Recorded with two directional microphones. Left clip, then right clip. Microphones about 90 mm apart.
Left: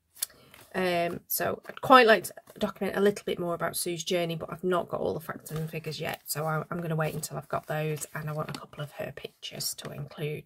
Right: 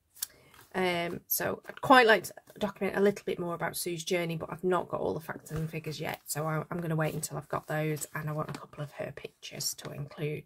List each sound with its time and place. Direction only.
0.7 s speech: 20° left (ahead or behind)
6.6 s speech: 5° left (ahead or behind)